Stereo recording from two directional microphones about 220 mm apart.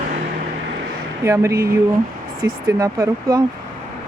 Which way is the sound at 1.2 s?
15° right (ahead or behind).